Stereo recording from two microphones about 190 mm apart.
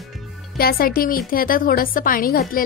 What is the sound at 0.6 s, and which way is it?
A woman's voice, 50° left (ahead or behind).